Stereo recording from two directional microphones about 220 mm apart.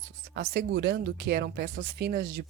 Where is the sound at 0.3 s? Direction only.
50° right (ahead or behind).